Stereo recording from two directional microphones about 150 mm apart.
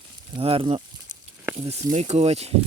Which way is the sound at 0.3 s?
35° right (ahead or behind).